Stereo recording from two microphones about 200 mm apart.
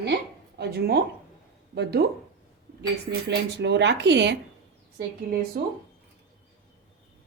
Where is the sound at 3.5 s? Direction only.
60° right (ahead or behind).